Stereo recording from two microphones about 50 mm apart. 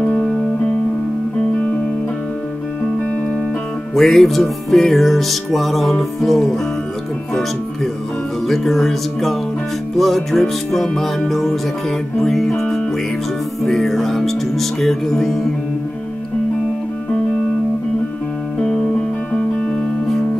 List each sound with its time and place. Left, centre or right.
0.0 s music: left
3.9 s music: centre
8.5 s music: centre
18.6 s music: centre